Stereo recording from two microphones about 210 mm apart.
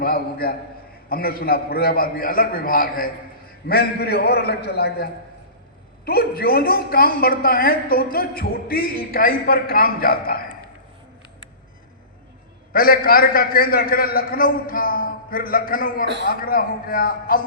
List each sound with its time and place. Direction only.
0.0 s a woman's voice: 45° left (ahead or behind)
6.1 s a woman's voice: 45° left (ahead or behind)
12.7 s a woman's voice: 45° left (ahead or behind)